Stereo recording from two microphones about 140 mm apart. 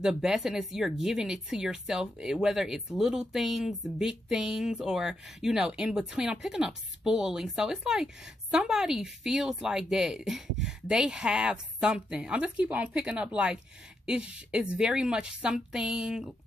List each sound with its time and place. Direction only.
0.0 s a woman's voice: 5° right (ahead or behind)